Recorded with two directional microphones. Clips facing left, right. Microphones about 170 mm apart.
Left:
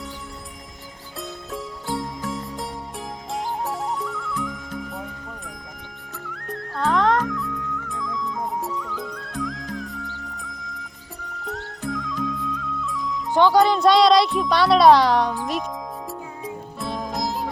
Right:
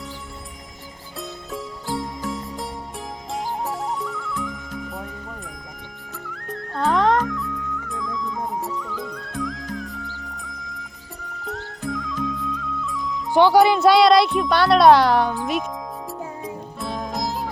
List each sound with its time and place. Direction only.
1.2 s music: centre (ahead or behind)
6.2 s music: centre (ahead or behind)
13.3 s speech: 10° right (ahead or behind)
16.0 s music: centre (ahead or behind)